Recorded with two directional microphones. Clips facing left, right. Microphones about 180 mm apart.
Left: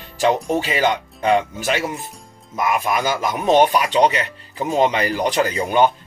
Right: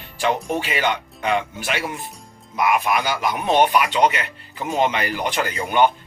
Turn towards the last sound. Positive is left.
turn(degrees=35)  # may be behind; listen again after turning